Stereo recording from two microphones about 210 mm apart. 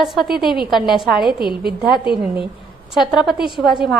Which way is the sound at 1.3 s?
45° right (ahead or behind).